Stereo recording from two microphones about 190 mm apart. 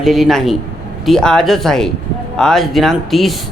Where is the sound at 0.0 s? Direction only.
Centre (ahead or behind).